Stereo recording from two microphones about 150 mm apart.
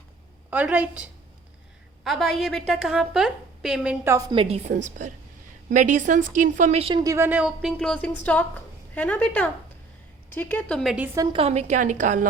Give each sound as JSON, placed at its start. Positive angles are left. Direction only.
{"t": 0.5, "sound": "a woman's voice", "side_deg": -10}
{"t": 4.3, "sound": "a woman's voice", "side_deg": -40}
{"t": 7.0, "sound": "speech", "side_deg": -20}
{"t": 7.3, "sound": "a woman's voice", "side_deg": -5}
{"t": 7.8, "sound": "a woman's voice", "side_deg": 5}
{"t": 10.9, "sound": "a woman's voice", "side_deg": -10}
{"t": 11.2, "sound": "a woman's voice", "side_deg": -35}